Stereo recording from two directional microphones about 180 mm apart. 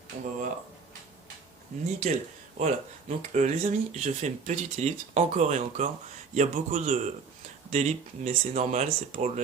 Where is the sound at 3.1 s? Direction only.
40° right (ahead or behind).